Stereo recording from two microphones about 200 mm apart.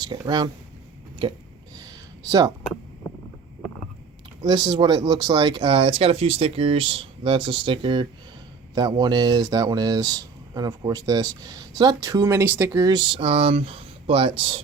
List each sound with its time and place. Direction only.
0.0 s speech: 20° right (ahead or behind)
4.4 s speech: 20° right (ahead or behind)